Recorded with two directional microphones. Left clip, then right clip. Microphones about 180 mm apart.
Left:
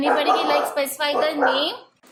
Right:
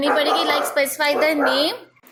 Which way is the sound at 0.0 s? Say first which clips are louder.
Right 1 dB; 30° right (ahead or behind).